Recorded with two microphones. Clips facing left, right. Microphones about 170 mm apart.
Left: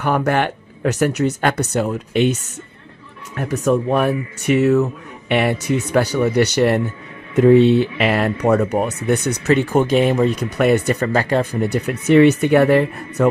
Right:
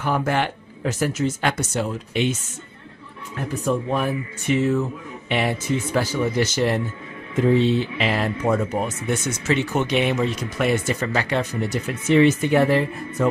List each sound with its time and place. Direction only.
0.0 s speech: 65° left (ahead or behind)
3.3 s speech: 80° left; by 9.8 s 55° left (ahead or behind)
9.8 s speech: 45° left (ahead or behind)
11.1 s speech: 45° left (ahead or behind); by 13.3 s 65° left (ahead or behind)